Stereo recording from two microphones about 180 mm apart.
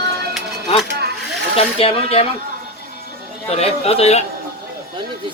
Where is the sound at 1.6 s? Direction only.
35° left (ahead or behind).